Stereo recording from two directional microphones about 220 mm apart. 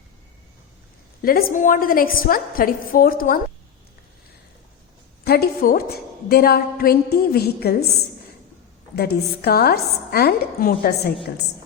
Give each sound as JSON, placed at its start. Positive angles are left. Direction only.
{"t": 1.2, "sound": "a woman's voice", "side_deg": 40}
{"t": 5.2, "sound": "a woman's voice", "side_deg": 45}
{"t": 9.0, "sound": "a woman's voice", "side_deg": 45}